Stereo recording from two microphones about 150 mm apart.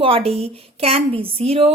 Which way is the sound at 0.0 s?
40° right (ahead or behind).